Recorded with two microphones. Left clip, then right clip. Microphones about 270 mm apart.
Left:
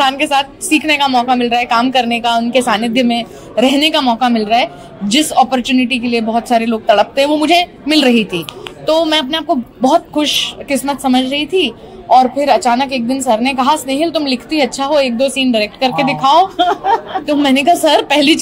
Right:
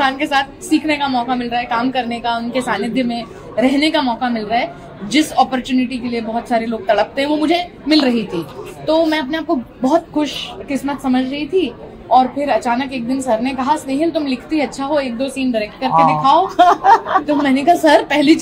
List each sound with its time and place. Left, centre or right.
0.0 s a woman's voice: left
16.5 s speech: right
17.3 s a woman's voice: left